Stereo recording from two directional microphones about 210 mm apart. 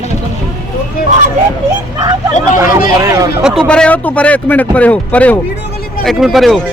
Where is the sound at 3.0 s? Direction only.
15° right (ahead or behind).